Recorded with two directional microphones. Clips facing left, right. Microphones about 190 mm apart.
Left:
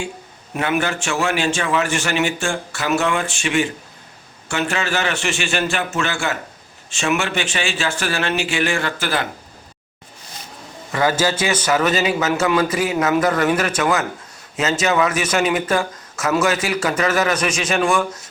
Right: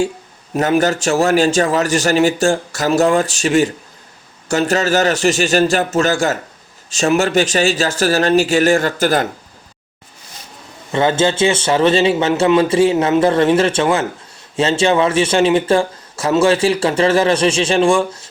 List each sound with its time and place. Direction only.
0.5 s a man's voice: 40° right (ahead or behind)
10.9 s speech: 25° right (ahead or behind)